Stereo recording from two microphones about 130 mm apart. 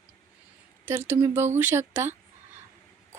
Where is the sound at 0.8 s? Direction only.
20° right (ahead or behind).